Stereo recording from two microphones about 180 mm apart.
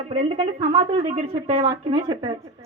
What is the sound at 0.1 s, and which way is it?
A woman's voice, 30° right (ahead or behind).